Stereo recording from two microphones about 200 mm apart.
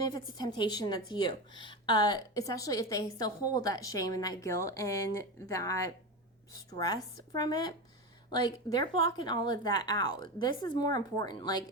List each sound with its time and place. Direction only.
0.0 s a woman's voice: 20° left (ahead or behind)